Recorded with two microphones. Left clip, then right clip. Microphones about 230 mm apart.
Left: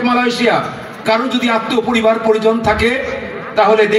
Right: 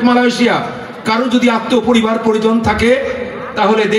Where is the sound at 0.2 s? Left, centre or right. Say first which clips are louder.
Right 1 dB; right.